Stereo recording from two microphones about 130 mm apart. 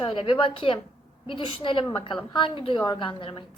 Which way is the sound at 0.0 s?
40° left (ahead or behind).